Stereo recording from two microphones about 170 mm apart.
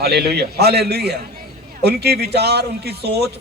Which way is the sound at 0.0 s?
70° right (ahead or behind).